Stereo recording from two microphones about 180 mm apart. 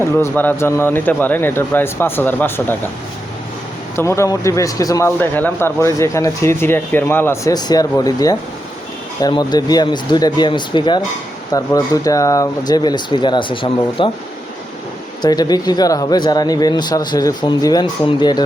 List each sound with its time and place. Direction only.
0.0 s speech: 10° left (ahead or behind)
3.9 s speech: 15° left (ahead or behind)
15.2 s speech: 20° left (ahead or behind)